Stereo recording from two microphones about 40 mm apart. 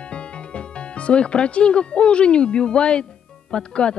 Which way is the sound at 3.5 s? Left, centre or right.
Left.